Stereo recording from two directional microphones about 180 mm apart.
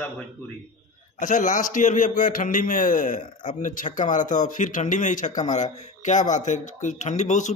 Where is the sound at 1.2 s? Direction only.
45° left (ahead or behind).